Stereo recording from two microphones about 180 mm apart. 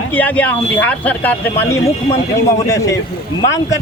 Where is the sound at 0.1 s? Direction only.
10° left (ahead or behind).